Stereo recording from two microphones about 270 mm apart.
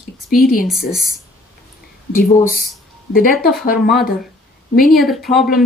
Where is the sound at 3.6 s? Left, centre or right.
Left.